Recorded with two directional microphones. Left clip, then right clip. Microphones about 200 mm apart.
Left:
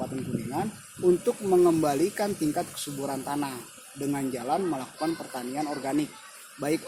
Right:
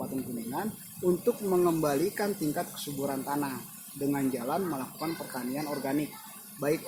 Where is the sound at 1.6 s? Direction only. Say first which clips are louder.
Left 4 dB; 35° left (ahead or behind).